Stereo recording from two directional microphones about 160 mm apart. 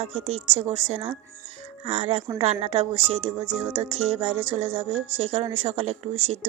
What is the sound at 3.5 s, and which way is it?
Speech, 15° right (ahead or behind).